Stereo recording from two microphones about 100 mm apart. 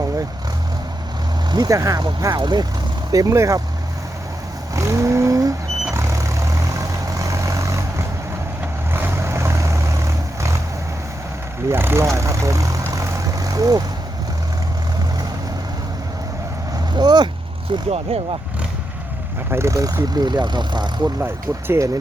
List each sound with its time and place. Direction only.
1.5 s speech: 40° right (ahead or behind)
3.1 s speech: 35° right (ahead or behind)
4.7 s vehicle: 30° right (ahead or behind)
11.7 s speech: 25° right (ahead or behind)
16.9 s vehicle: 45° right (ahead or behind)
17.9 s speech: 90° right
19.5 s speech: 30° right (ahead or behind); by 20.9 s 45° right (ahead or behind)
21.0 s speech: 20° right (ahead or behind)